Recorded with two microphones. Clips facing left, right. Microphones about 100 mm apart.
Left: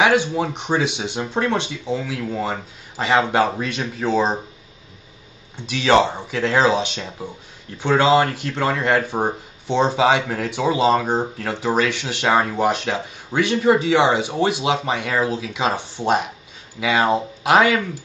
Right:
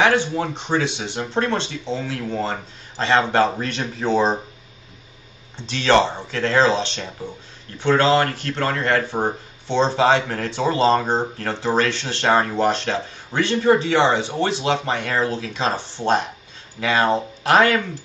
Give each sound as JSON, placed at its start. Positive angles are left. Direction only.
{"t": 0.0, "sound": "speech", "side_deg": 15}
{"t": 5.7, "sound": "speech", "side_deg": 10}